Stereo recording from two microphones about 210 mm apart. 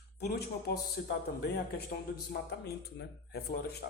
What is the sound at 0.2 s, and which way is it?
Speech, 50° left (ahead or behind).